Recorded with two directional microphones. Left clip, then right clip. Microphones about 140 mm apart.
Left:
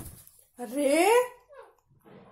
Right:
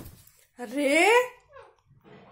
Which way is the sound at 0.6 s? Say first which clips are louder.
Right 2 dB; centre (ahead or behind).